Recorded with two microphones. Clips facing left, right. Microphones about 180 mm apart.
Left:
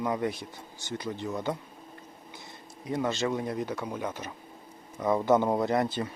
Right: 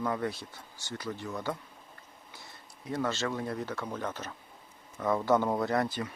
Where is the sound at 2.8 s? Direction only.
15° left (ahead or behind).